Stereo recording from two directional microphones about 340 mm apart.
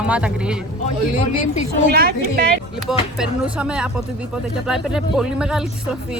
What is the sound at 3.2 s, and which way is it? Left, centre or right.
Speech, centre.